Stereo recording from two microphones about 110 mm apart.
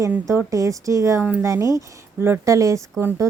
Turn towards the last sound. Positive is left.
turn(degrees=-25)  # may be behind; listen again after turning